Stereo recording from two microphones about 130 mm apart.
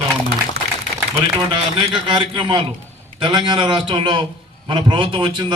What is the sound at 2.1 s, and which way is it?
A man's voice, 40° right (ahead or behind).